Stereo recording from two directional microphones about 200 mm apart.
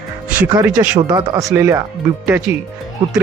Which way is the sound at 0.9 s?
20° right (ahead or behind).